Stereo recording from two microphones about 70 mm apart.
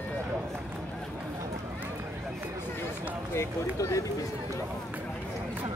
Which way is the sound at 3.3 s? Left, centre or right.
Left.